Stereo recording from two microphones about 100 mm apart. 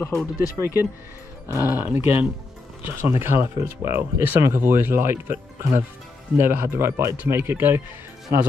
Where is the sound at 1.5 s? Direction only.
25° right (ahead or behind).